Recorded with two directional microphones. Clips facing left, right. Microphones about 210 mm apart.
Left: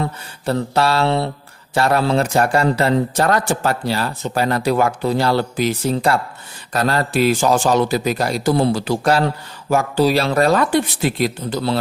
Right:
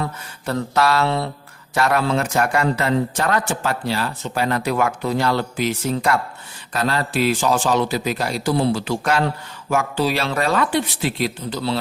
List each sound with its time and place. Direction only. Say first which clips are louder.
0.0 s mantra: left 4 dB; 30° left (ahead or behind)
1.7 s a man's voice: left 3 dB; 30° left (ahead or behind); by 11.8 s 45° left (ahead or behind)